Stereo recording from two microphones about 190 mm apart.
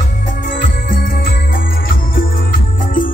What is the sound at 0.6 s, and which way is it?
Jingle bell, 45° left (ahead or behind).